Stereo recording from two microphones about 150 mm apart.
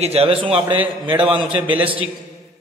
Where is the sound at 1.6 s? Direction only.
10° right (ahead or behind).